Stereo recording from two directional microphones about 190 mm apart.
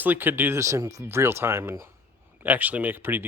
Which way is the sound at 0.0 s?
10° right (ahead or behind).